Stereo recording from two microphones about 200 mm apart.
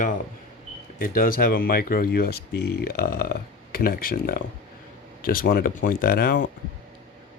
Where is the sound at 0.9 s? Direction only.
45° left (ahead or behind).